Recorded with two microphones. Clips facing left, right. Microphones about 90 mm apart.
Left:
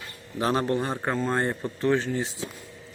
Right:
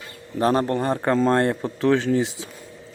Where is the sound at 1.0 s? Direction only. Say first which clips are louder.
Right 9 dB; 85° right.